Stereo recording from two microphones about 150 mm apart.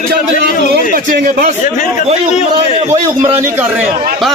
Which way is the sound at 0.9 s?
65° right (ahead or behind).